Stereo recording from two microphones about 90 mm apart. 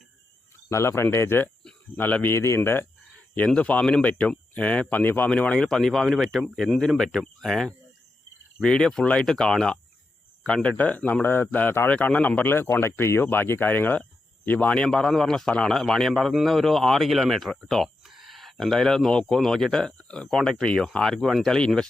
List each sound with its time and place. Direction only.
0.7 s speech: 30° left (ahead or behind)
2.3 s speech: 30° left (ahead or behind)
3.3 s a man's voice: 15° left (ahead or behind)
14.8 s a man's voice: 5° left (ahead or behind)